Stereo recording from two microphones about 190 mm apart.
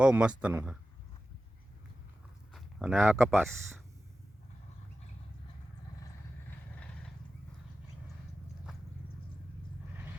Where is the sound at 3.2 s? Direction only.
10° right (ahead or behind).